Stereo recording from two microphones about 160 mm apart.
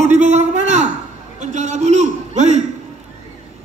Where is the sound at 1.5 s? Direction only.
45° right (ahead or behind).